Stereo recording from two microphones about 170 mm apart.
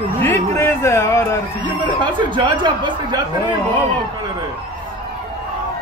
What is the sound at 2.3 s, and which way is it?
Speech, 30° right (ahead or behind).